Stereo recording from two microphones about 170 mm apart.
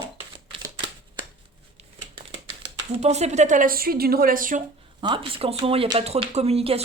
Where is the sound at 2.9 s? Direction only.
40° right (ahead or behind).